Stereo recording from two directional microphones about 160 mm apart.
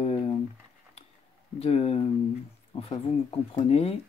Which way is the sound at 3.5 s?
40° left (ahead or behind).